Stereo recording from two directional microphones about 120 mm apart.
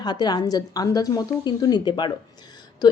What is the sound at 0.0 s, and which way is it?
Speech, 35° left (ahead or behind).